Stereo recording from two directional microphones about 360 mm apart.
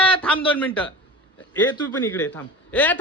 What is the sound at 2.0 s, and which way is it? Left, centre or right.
Speech, centre.